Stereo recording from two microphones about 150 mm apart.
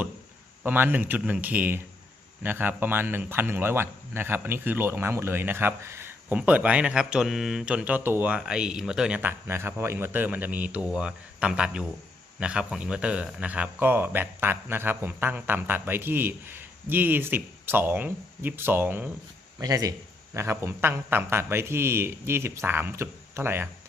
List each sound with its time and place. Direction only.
0.6 s a man's voice: 15° right (ahead or behind)
19.5 s a man's voice: 25° right (ahead or behind)